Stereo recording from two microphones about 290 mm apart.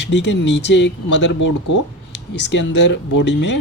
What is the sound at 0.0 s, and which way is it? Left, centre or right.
Speech, left.